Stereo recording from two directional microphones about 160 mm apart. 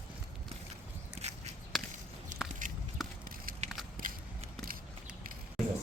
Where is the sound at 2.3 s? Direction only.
50° right (ahead or behind).